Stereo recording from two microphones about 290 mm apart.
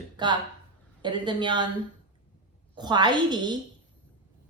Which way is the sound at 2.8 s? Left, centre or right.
Centre.